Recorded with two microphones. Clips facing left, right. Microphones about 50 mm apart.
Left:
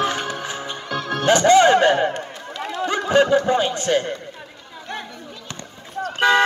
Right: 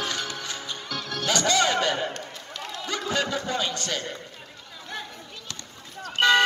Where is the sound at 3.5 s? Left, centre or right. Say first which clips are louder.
Left 9 dB; left.